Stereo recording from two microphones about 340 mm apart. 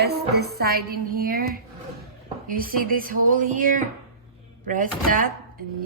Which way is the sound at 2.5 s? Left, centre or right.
Right.